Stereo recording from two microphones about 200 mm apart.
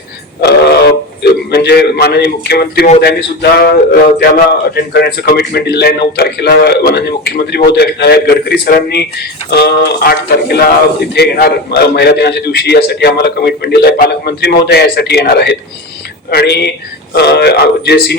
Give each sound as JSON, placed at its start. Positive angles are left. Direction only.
{"t": 0.4, "sound": "a man's voice", "side_deg": 55}